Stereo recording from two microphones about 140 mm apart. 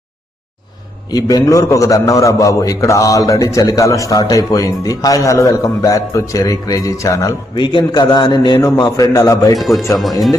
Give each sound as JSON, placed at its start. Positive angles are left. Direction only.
{"t": 1.1, "sound": "a man's voice", "side_deg": 25}
{"t": 8.5, "sound": "a man's voice", "side_deg": 15}
{"t": 9.6, "sound": "speech", "side_deg": 0}